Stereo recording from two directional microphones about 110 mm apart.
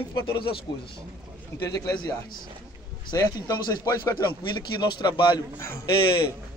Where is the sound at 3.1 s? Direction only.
30° left (ahead or behind).